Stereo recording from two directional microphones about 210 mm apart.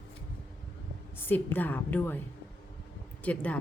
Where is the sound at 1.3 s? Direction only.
10° left (ahead or behind).